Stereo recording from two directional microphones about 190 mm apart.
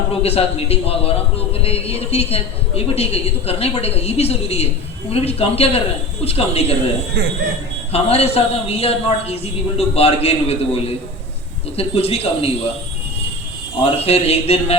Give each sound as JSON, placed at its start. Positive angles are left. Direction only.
{"t": 0.2, "sound": "a woman's voice", "side_deg": 30}
{"t": 7.9, "sound": "a woman's voice", "side_deg": 30}
{"t": 13.8, "sound": "a woman's voice", "side_deg": 30}